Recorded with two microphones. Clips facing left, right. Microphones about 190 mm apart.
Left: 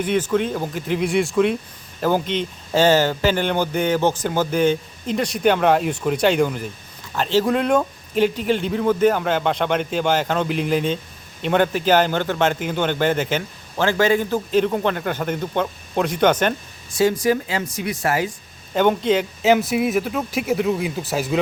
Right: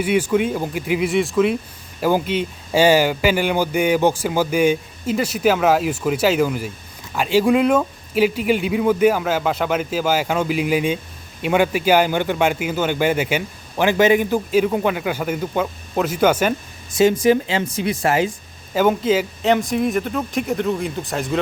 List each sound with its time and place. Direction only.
0.0 s a man's voice: 10° right (ahead or behind)
16.9 s speech: 20° right (ahead or behind)
18.7 s speech: 5° right (ahead or behind)